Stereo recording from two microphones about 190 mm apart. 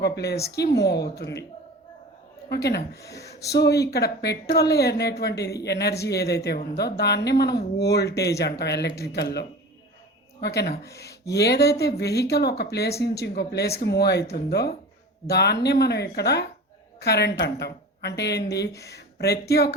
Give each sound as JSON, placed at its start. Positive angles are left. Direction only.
{"t": 0.0, "sound": "speech", "side_deg": 60}
{"t": 2.5, "sound": "speech", "side_deg": 60}
{"t": 18.7, "sound": "speech", "side_deg": 15}
{"t": 18.9, "sound": "speech", "side_deg": 55}